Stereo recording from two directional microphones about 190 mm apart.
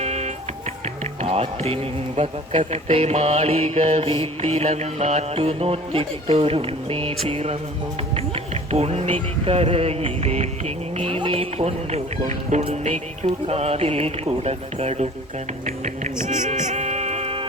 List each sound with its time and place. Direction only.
0.0 s music: 35° right (ahead or behind)
1.2 s speech: 30° right (ahead or behind)
8.7 s speech: 35° right (ahead or behind)
15.6 s music: 40° right (ahead or behind)